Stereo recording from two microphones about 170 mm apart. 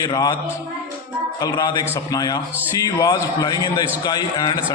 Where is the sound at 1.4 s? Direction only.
25° left (ahead or behind).